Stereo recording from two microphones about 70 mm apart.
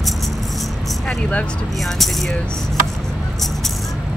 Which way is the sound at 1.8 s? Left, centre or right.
Centre.